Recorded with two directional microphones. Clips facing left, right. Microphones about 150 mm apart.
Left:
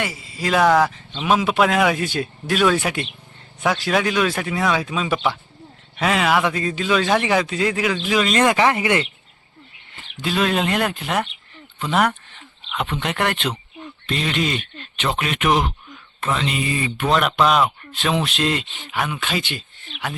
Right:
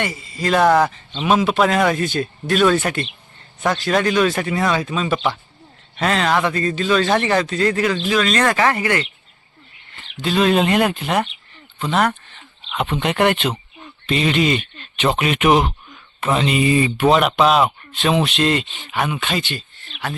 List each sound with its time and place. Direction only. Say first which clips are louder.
0.0 s a man's voice: right 2 dB; 5° left (ahead or behind)
10.2 s speech: right 4 dB; centre (ahead or behind)
12.7 s speech: right 4 dB; 5° right (ahead or behind)
17.2 s speech: right 2 dB; 5° right (ahead or behind)
19.4 s speech: right 2 dB; 15° left (ahead or behind)